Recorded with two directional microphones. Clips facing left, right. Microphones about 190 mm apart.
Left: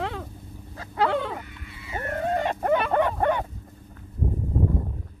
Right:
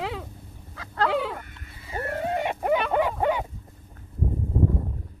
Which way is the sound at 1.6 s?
40° right (ahead or behind).